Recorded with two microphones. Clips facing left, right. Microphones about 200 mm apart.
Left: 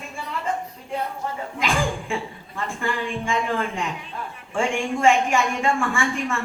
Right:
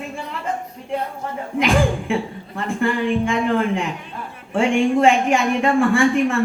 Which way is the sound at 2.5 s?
55° right (ahead or behind).